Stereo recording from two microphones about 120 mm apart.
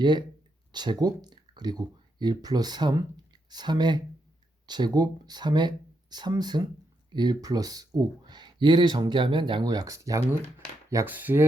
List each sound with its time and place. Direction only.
0.0 s speech: 40° right (ahead or behind)
11.0 s speech: 15° right (ahead or behind)